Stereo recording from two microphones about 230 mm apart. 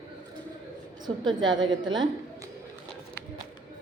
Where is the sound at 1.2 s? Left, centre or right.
Centre.